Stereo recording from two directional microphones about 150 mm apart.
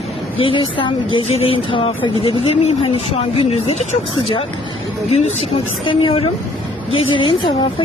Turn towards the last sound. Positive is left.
turn(degrees=35)  # may be behind; listen again after turning